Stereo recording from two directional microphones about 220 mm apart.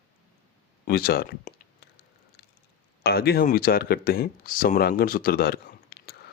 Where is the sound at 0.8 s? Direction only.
45° left (ahead or behind).